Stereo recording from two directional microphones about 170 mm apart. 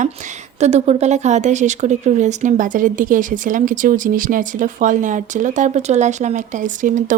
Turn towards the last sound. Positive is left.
turn(degrees=-50)  # may be behind; listen again after turning